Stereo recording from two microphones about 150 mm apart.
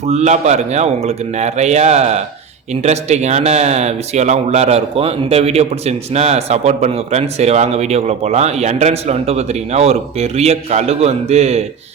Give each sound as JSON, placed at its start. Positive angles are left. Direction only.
{"t": 0.0, "sound": "speech", "side_deg": -45}